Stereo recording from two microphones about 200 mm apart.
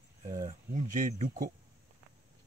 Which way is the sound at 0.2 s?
20° right (ahead or behind).